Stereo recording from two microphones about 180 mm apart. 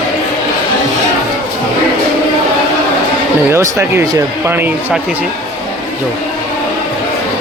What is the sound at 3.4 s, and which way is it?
Speech, 15° right (ahead or behind).